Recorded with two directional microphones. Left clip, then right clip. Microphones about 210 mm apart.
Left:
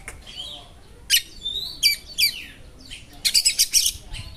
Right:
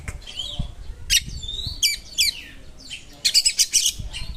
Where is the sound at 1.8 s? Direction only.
10° right (ahead or behind).